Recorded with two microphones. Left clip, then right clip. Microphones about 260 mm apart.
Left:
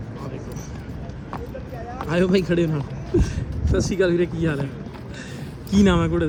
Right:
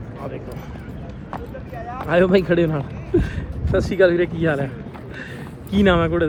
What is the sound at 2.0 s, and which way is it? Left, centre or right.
A man's voice, centre.